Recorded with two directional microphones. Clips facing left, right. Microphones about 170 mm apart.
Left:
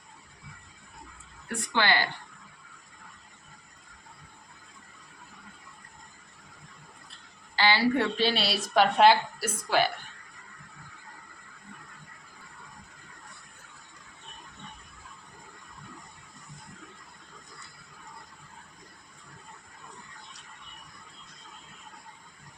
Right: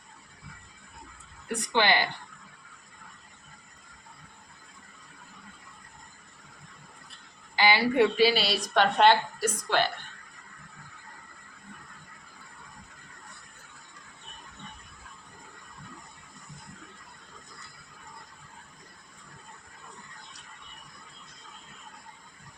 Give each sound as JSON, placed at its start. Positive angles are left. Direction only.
{"t": 1.6, "sound": "a woman's voice", "side_deg": -20}
{"t": 7.5, "sound": "a woman's voice", "side_deg": -15}